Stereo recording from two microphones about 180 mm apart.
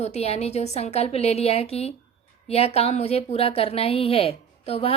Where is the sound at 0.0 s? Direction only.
35° left (ahead or behind).